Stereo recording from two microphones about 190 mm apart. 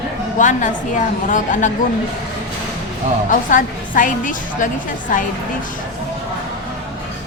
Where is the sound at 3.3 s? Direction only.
45° left (ahead or behind).